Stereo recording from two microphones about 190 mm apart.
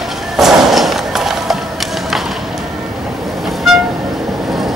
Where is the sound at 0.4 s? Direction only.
Centre (ahead or behind).